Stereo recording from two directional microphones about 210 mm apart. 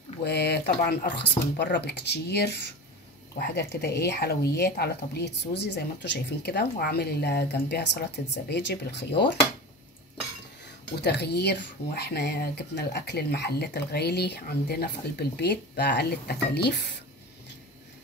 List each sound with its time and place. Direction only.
0.2 s speech: 50° left (ahead or behind)
11.0 s speech: 55° left (ahead or behind)